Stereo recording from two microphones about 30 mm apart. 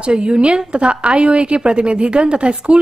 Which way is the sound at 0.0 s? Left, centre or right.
Right.